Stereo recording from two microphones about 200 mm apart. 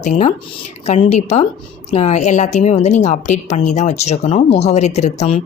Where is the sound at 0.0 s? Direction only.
35° left (ahead or behind).